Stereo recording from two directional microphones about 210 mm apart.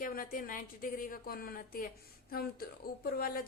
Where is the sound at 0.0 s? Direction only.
40° left (ahead or behind).